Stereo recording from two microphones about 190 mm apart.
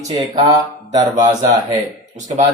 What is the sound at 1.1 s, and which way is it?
Mantra, 40° right (ahead or behind).